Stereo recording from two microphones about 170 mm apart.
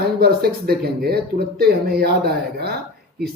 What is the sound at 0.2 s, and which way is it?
Speech, 65° right (ahead or behind).